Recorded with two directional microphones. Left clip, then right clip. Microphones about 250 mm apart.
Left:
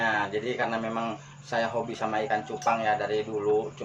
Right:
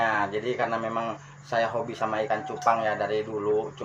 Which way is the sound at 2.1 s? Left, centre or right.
Centre.